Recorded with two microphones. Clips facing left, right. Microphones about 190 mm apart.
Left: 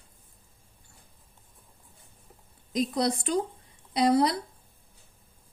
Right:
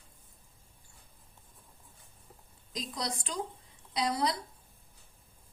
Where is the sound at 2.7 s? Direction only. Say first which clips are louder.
Left 11 dB; 60° left (ahead or behind).